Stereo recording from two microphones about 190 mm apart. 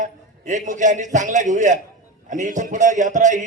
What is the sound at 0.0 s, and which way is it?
A man's voice, 40° right (ahead or behind).